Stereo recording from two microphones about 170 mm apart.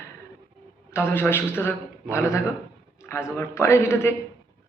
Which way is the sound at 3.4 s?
15° left (ahead or behind).